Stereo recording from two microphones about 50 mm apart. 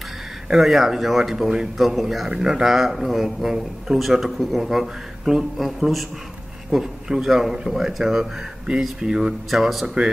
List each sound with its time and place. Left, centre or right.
0.5 s speech: centre
9.8 s speech: centre